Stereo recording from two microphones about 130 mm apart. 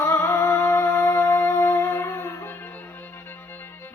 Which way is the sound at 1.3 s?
10° left (ahead or behind).